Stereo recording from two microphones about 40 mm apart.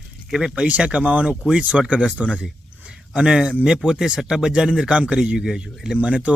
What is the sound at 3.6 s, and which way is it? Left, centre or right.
Speech, centre.